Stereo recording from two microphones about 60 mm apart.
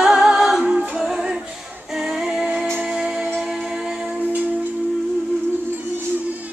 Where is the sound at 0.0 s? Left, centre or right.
Centre.